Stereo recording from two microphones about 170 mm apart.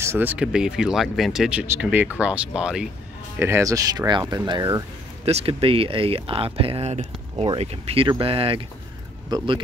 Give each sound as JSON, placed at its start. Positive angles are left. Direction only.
{"t": 0.0, "sound": "speech", "side_deg": -15}
{"t": 3.3, "sound": "speech", "side_deg": -15}
{"t": 5.2, "sound": "speech", "side_deg": -35}